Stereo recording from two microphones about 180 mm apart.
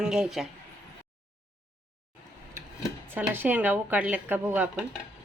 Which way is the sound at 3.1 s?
10° right (ahead or behind).